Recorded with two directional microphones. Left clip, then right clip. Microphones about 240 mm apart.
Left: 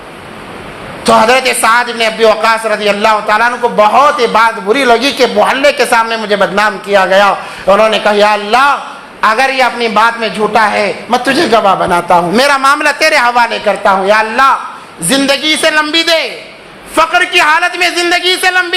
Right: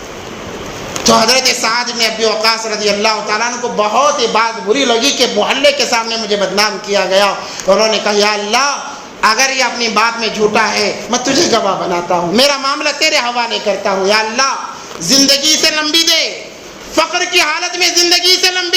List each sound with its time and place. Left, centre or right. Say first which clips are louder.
1.0 s a woman's voice: left 3 dB; left